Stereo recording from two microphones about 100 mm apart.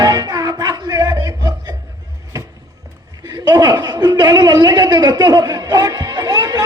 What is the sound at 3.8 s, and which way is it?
A man's voice, 50° right (ahead or behind).